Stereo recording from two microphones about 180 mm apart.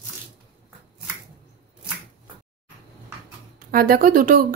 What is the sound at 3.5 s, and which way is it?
Speech, 55° right (ahead or behind).